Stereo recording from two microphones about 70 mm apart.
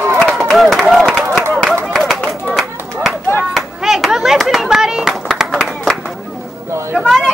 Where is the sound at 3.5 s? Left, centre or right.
Centre.